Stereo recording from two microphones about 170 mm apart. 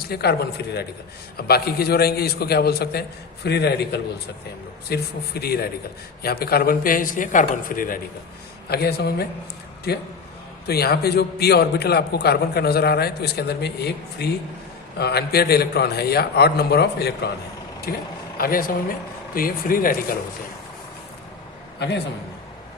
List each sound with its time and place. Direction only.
0.0 s a man's voice: 70° left (ahead or behind)
8.7 s a man's voice: 70° left (ahead or behind)
17.9 s a man's voice: 60° left (ahead or behind)
21.8 s a man's voice: 90° left